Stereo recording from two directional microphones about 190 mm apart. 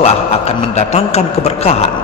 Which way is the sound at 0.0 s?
35° left (ahead or behind).